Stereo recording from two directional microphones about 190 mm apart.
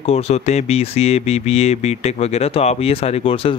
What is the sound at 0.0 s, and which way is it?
Speech, 35° left (ahead or behind).